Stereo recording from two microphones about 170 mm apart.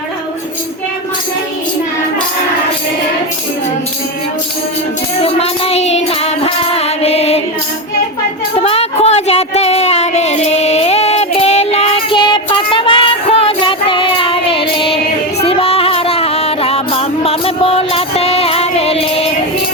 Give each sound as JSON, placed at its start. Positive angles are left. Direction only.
{"t": 5.2, "sound": "music", "side_deg": 35}
{"t": 8.6, "sound": "a sound", "side_deg": 35}
{"t": 15.4, "sound": "music", "side_deg": 35}